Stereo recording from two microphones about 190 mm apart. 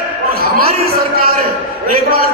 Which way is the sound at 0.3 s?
55° right (ahead or behind).